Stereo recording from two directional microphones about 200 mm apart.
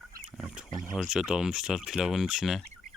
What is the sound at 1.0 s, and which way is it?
Speech, 5° right (ahead or behind).